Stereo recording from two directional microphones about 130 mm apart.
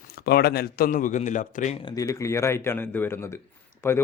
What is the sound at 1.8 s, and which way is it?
Speech, 30° left (ahead or behind).